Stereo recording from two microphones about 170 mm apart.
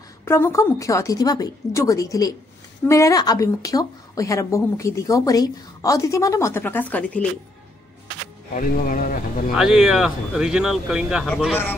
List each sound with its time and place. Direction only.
0.2 s a woman's voice: 15° left (ahead or behind)
8.5 s speech: 55° left (ahead or behind)
9.6 s speech: 5° right (ahead or behind)